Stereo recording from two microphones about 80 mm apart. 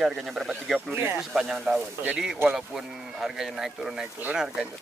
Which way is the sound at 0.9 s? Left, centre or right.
Right.